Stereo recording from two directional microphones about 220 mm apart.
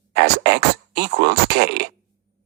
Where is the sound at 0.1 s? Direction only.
55° right (ahead or behind).